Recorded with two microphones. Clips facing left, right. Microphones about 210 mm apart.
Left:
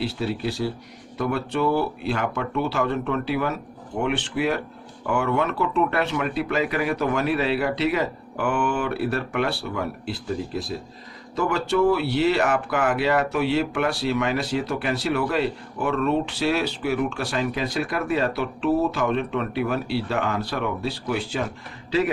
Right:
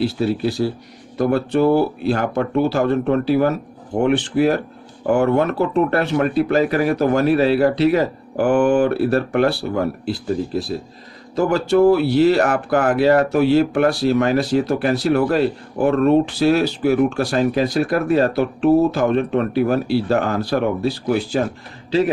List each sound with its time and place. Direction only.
1.2 s speech: 40° right (ahead or behind)
11.3 s speech: 35° right (ahead or behind)